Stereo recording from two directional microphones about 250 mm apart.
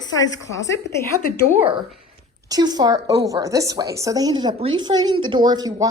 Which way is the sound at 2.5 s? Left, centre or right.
Centre.